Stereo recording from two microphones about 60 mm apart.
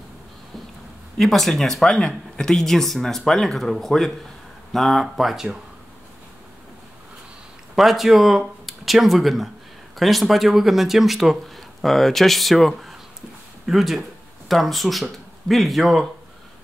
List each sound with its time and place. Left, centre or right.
1.1 s speech: centre
7.7 s speech: centre